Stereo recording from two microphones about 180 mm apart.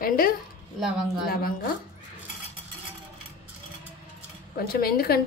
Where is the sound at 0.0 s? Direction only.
55° left (ahead or behind).